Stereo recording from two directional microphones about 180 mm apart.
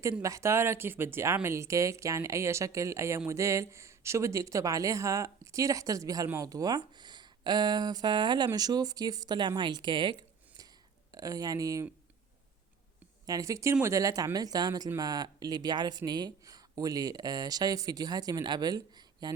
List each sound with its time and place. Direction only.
0.0 s speech: 15° right (ahead or behind)
13.2 s speech: 20° right (ahead or behind)